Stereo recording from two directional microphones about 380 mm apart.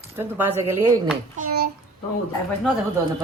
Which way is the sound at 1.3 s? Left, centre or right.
Right.